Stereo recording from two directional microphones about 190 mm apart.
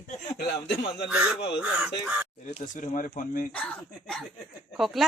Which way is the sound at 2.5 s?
40° left (ahead or behind).